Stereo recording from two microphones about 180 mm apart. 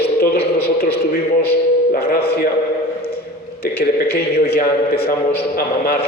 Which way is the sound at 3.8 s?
60° left (ahead or behind).